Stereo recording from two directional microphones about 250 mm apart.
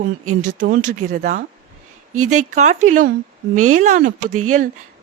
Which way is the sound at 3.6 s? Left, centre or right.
Right.